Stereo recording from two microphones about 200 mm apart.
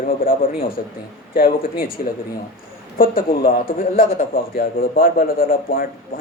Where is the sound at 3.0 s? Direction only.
45° left (ahead or behind).